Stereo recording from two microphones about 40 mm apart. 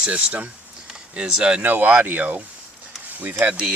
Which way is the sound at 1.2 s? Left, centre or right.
Centre.